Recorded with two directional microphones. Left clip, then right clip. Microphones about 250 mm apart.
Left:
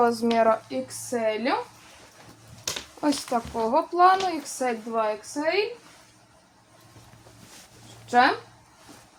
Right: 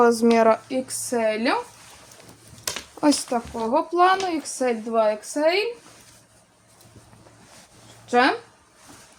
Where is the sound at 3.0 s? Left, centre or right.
Right.